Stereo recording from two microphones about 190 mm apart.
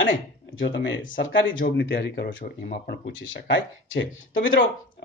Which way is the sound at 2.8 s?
70° left (ahead or behind).